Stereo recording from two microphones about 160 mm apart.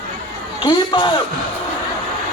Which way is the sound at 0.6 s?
30° left (ahead or behind).